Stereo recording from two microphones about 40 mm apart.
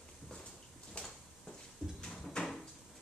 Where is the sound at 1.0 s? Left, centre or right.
Left.